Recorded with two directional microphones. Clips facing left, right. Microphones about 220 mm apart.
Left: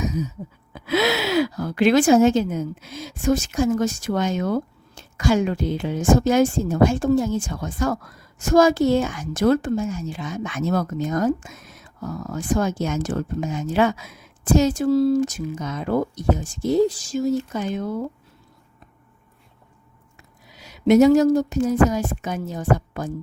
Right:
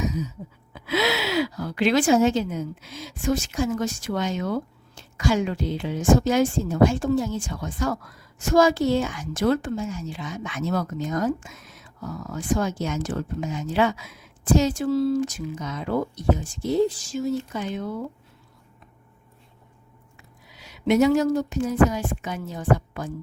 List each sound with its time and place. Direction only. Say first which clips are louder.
0.0 s a sound: left 2 dB; 45° left (ahead or behind)
0.7 s speech: left 3 dB; 45° left (ahead or behind)
20.1 s speech: left 3 dB; 45° left (ahead or behind)